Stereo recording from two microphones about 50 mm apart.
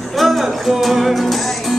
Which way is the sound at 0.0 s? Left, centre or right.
Centre.